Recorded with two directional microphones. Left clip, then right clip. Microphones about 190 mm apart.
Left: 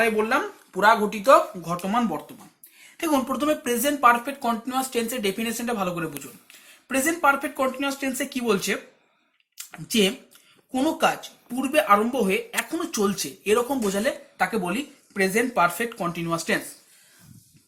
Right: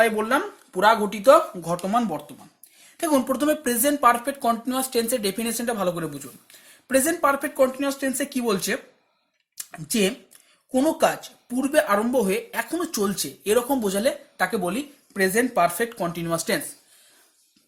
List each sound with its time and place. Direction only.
0.0 s speech: 60° right (ahead or behind)
9.7 s speech: 65° right (ahead or behind)
16.0 s speech: 65° right (ahead or behind)